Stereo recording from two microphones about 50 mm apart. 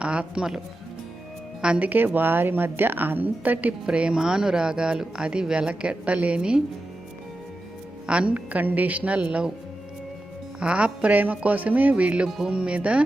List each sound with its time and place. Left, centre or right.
0.0 s a woman's voice: right
1.8 s speech: right
3.8 s a woman's voice: right
8.0 s a woman's voice: right
10.6 s a woman's voice: right